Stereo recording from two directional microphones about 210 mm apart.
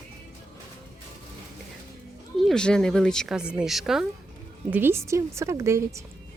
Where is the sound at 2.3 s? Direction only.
Centre (ahead or behind); by 6.0 s 15° right (ahead or behind).